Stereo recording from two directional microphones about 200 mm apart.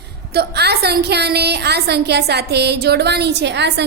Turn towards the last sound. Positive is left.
turn(degrees=-60)  # may be behind; listen again after turning